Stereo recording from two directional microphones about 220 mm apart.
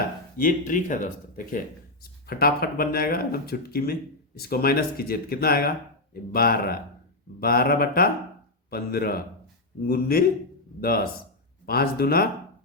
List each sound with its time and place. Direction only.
0.3 s speech: 35° left (ahead or behind)